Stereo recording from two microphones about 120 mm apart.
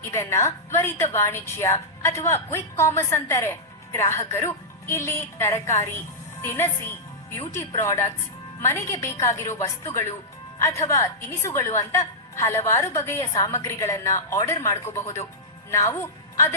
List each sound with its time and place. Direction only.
0.1 s a woman's voice: 20° left (ahead or behind)